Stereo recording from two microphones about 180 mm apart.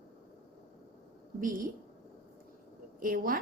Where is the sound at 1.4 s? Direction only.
50° right (ahead or behind).